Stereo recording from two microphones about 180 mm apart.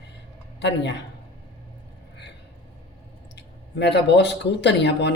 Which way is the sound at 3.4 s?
70° left (ahead or behind).